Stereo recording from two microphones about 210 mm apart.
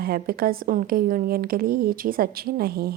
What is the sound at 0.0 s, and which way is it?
Speech, 45° right (ahead or behind).